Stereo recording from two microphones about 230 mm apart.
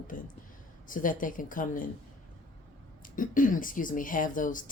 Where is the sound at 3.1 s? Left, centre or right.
Left.